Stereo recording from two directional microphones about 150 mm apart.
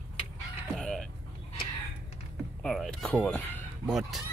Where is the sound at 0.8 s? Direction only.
5° left (ahead or behind).